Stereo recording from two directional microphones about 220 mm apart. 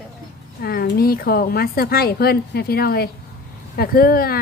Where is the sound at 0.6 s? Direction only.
45° left (ahead or behind).